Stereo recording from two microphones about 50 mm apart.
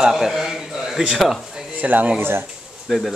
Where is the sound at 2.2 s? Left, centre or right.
Right.